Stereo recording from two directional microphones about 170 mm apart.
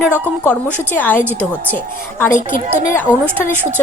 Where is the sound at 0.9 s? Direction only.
10° left (ahead or behind).